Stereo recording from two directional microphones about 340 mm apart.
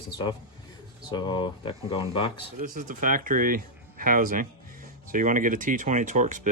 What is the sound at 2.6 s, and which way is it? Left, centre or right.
Speech, right.